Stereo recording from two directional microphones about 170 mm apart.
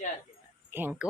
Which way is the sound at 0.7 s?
10° right (ahead or behind).